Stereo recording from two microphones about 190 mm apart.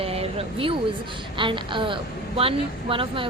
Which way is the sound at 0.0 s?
30° right (ahead or behind).